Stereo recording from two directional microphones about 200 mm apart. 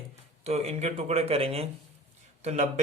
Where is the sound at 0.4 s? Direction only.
30° right (ahead or behind).